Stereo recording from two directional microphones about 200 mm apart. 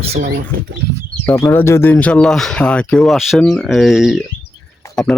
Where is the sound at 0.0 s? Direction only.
35° right (ahead or behind).